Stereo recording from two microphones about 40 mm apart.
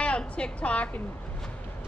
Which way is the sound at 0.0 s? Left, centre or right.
Left.